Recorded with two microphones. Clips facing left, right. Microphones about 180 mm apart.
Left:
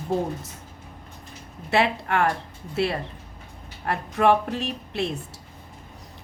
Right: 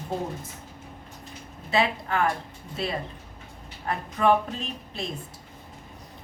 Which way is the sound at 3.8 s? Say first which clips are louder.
Left 2 dB; 70° left (ahead or behind).